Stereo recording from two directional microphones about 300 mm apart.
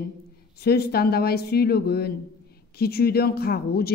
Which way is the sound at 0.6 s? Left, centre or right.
Left.